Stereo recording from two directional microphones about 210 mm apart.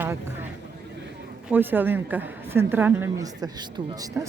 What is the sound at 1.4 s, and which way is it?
A woman's voice, 10° right (ahead or behind).